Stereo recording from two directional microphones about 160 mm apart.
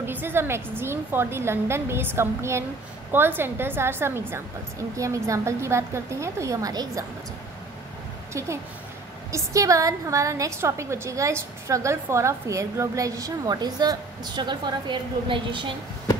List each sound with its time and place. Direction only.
0.0 s a woman's voice: 15° right (ahead or behind)
8.3 s a woman's voice: 15° right (ahead or behind)